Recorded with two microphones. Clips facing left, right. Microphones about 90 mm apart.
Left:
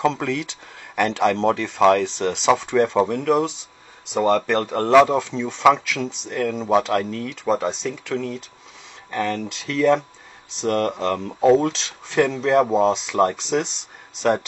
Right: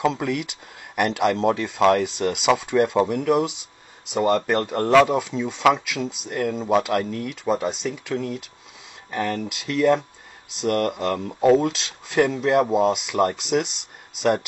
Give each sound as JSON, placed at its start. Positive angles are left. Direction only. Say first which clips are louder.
{"t": 0.0, "sound": "speech", "louder": "left 1 dB", "side_deg": -5}